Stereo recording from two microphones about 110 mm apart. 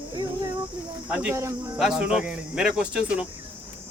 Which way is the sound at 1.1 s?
10° right (ahead or behind).